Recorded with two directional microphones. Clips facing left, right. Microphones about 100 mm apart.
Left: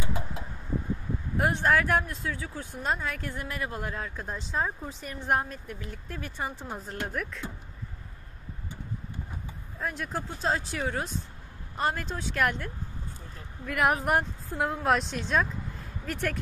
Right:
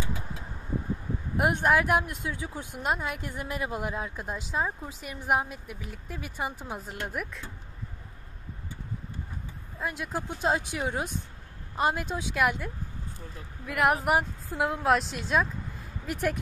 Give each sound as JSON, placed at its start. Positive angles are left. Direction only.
{"t": 1.3, "sound": "speech", "side_deg": -15}
{"t": 9.8, "sound": "speech", "side_deg": -5}